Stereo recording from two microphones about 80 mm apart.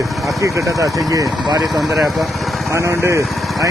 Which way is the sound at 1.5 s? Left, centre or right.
Right.